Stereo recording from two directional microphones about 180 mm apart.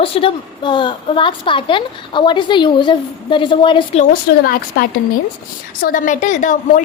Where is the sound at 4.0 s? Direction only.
55° left (ahead or behind).